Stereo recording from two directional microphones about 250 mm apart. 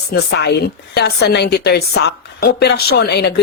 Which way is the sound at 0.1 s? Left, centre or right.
Left.